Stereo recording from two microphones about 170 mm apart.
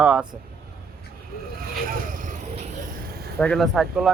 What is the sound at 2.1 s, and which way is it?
Vehicle, 45° right (ahead or behind).